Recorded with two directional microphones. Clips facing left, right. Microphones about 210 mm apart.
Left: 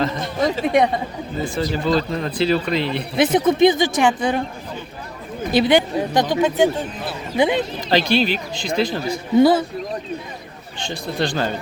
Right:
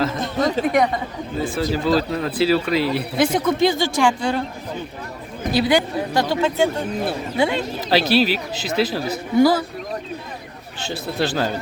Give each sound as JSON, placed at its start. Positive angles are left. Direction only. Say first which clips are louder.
{"t": 0.6, "sound": "speech", "louder": "left 2 dB", "side_deg": 25}
{"t": 1.5, "sound": "speech", "louder": "even", "side_deg": -5}
{"t": 3.2, "sound": "speech", "louder": "left 4 dB", "side_deg": 20}
{"t": 5.5, "sound": "speech", "louder": "left 3 dB", "side_deg": 20}
{"t": 7.9, "sound": "speech", "louder": "right 1 dB", "side_deg": -5}
{"t": 9.4, "sound": "speech", "louder": "left 1 dB", "side_deg": 25}
{"t": 10.8, "sound": "speech", "louder": "even", "side_deg": -5}